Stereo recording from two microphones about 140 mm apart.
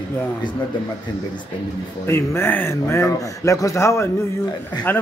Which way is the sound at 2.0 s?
20° left (ahead or behind).